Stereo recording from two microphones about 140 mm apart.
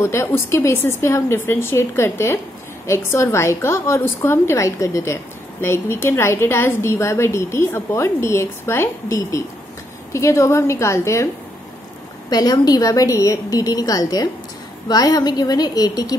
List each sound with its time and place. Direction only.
0.0 s a woman's voice: 20° left (ahead or behind)
12.3 s a woman's voice: 30° left (ahead or behind)